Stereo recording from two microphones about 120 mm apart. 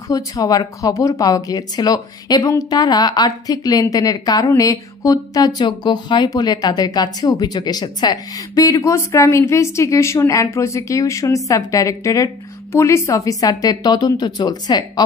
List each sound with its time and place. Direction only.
0.1 s speech: 30° left (ahead or behind)